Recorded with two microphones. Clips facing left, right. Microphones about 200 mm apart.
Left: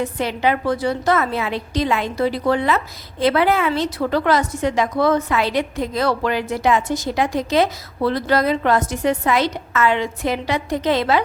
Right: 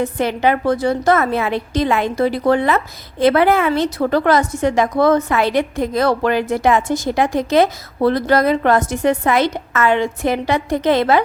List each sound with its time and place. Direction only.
0.0 s a woman's voice: 50° right (ahead or behind)